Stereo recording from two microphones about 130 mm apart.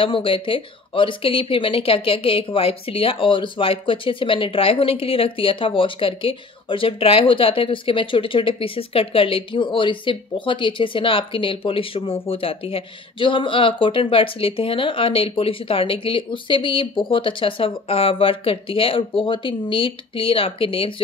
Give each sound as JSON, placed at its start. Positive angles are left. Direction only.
{"t": 0.0, "sound": "speech", "side_deg": 40}